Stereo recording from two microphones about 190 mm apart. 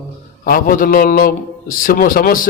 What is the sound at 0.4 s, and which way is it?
A man's voice, 45° left (ahead or behind).